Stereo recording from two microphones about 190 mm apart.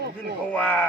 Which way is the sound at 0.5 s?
5° left (ahead or behind).